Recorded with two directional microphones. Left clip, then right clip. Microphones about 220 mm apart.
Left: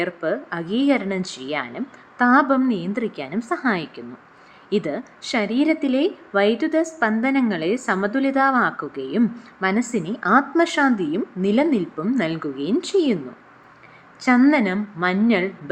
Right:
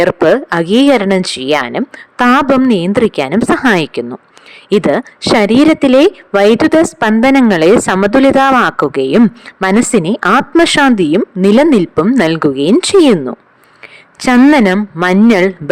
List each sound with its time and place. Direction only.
0.0 s speech: 50° right (ahead or behind)
14.2 s speech: 50° right (ahead or behind)